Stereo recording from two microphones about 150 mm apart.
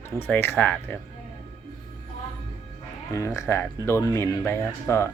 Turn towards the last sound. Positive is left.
turn(degrees=20)  # may be behind; listen again after turning